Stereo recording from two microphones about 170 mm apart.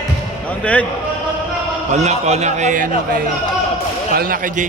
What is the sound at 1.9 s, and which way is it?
A man's voice, 40° right (ahead or behind).